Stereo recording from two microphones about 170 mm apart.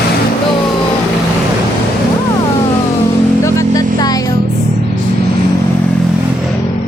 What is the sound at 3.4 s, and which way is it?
Vehicle, 20° left (ahead or behind).